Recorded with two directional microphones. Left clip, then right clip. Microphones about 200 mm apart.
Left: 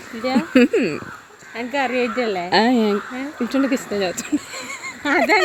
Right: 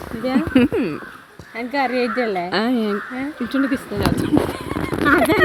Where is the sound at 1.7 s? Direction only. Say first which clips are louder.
Right 1 dB; 20° right (ahead or behind).